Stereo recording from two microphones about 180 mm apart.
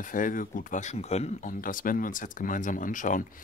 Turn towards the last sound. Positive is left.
turn(degrees=45)  # may be behind; listen again after turning